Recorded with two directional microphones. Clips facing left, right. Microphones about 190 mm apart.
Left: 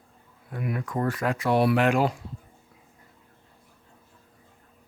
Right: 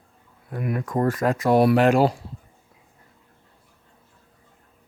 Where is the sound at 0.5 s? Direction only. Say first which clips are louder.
Right 4 dB; 45° right (ahead or behind).